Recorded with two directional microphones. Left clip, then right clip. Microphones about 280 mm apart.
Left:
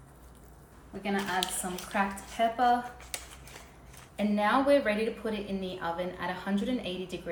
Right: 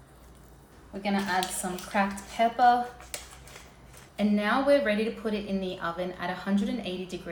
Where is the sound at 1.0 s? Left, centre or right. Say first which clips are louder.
Right 3 dB; centre.